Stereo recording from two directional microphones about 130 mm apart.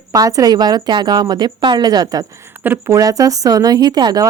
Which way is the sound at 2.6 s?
15° right (ahead or behind).